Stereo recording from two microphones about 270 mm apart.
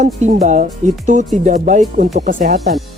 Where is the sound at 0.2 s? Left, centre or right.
Right.